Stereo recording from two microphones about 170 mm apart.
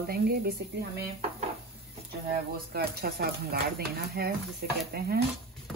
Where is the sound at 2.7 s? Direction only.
65° right (ahead or behind).